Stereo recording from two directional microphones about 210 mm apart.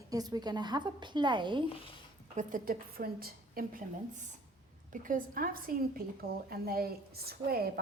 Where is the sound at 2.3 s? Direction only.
40° right (ahead or behind).